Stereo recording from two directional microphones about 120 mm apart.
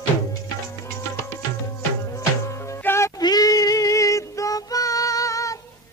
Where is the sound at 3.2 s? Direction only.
35° left (ahead or behind).